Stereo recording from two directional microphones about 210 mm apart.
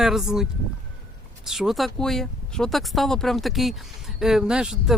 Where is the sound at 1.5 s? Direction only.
Centre (ahead or behind).